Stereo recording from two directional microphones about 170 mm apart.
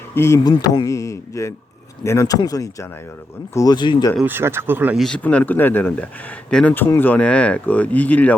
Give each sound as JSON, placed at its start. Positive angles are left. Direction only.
{"t": 0.1, "sound": "speech", "side_deg": 15}
{"t": 4.2, "sound": "speech", "side_deg": -10}
{"t": 4.9, "sound": "speech", "side_deg": 5}